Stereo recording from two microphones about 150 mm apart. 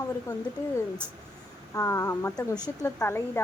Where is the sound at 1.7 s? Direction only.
20° left (ahead or behind).